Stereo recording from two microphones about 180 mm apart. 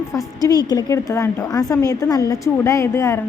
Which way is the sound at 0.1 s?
15° left (ahead or behind).